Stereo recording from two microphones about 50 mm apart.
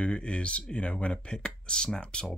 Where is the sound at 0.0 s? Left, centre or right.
Left.